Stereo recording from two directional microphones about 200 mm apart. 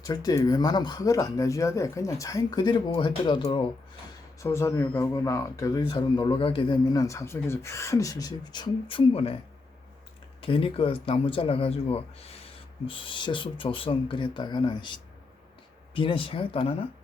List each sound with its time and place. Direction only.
0.0 s speech: 20° left (ahead or behind)
4.4 s speech: 15° left (ahead or behind)
10.4 s speech: 25° left (ahead or behind)
16.0 s speech: 25° left (ahead or behind)